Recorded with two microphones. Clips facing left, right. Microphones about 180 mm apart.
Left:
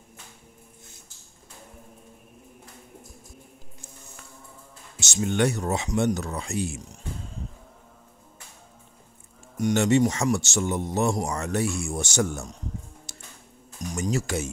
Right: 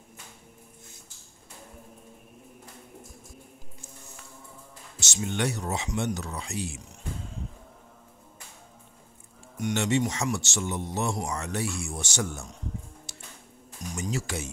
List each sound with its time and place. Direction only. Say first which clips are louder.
5.0 s speech: left 6 dB; 50° left (ahead or behind)
9.6 s speech: left 6 dB; 40° left (ahead or behind)
13.1 s music: even; 45° left (ahead or behind)
13.9 s speech: left 5 dB; 45° left (ahead or behind)